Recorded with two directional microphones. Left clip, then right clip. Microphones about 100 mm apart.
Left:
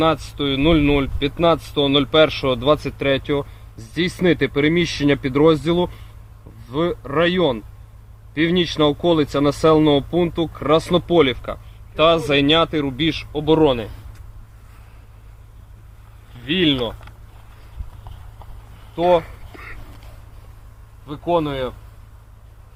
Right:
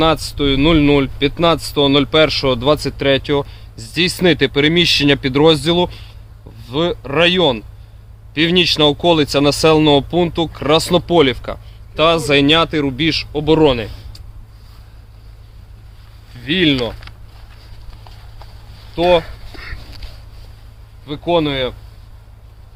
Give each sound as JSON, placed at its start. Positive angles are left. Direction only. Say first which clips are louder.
{"t": 0.0, "sound": "speech", "louder": "right 4 dB", "side_deg": -35}
{"t": 16.4, "sound": "speech", "louder": "right 3 dB", "side_deg": -25}
{"t": 16.9, "sound": "a sound", "louder": "right 4 dB", "side_deg": 5}
{"t": 19.0, "sound": "speech", "louder": "right 3 dB", "side_deg": -20}
{"t": 19.5, "sound": "a sound", "louder": "right 4 dB", "side_deg": -50}
{"t": 21.1, "sound": "speech", "louder": "right 4 dB", "side_deg": 0}